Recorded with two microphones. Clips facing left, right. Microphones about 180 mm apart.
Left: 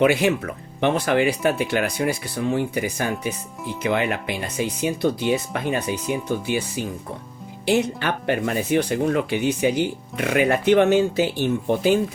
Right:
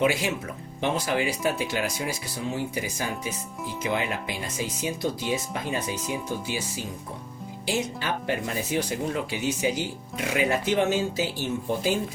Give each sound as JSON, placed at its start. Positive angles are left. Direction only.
{"t": 0.0, "sound": "speech", "side_deg": 60}